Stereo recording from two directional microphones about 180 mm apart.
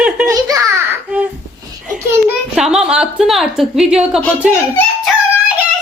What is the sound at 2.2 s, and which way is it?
A child's voice, 5° right (ahead or behind).